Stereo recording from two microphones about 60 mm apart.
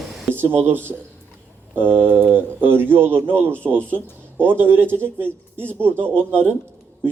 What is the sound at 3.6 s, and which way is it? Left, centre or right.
Speech, right.